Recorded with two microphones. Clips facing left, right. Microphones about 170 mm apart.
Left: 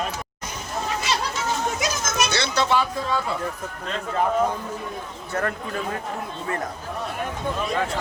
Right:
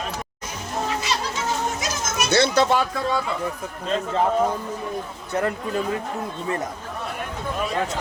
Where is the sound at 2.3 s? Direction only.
55° right (ahead or behind).